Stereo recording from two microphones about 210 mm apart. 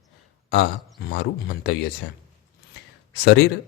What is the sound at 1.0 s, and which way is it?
Speech, 50° left (ahead or behind).